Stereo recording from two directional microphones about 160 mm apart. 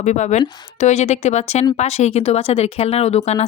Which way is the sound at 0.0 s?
45° left (ahead or behind).